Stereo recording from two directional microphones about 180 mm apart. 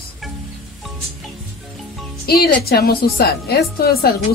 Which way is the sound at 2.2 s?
60° left (ahead or behind).